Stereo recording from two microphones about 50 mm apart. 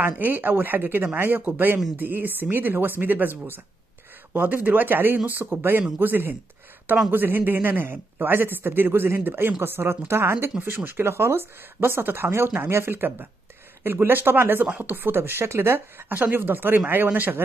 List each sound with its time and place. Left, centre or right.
0.0 s a man's voice: right
5.2 s a man's voice: right
10.6 s a man's voice: right
12.3 s a man's voice: right
16.1 s speech: right